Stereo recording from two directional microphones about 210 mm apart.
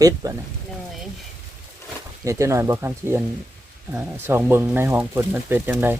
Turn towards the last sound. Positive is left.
turn(degrees=-10)  # may be behind; listen again after turning